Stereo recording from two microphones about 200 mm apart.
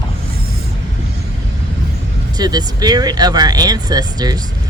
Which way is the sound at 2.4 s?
20° right (ahead or behind).